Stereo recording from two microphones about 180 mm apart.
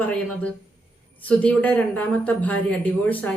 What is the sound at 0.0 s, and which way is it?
Speech, 5° left (ahead or behind).